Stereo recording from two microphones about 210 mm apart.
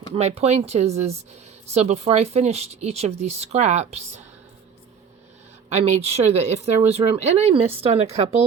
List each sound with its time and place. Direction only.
0.1 s speech: 30° right (ahead or behind)
5.6 s speech: 30° right (ahead or behind)